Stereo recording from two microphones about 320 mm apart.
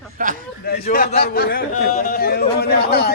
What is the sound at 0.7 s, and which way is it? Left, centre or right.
Speech, left.